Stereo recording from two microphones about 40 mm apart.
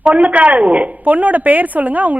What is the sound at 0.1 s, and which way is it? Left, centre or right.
A woman's voice, right.